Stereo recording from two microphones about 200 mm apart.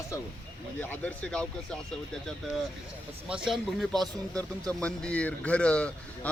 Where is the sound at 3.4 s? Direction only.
Centre (ahead or behind).